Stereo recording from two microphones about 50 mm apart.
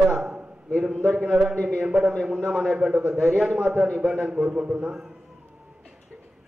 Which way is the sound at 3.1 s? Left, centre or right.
Centre.